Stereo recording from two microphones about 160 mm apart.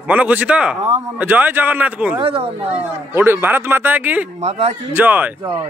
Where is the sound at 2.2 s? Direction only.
35° right (ahead or behind).